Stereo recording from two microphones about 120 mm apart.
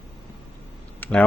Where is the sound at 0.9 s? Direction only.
15° left (ahead or behind).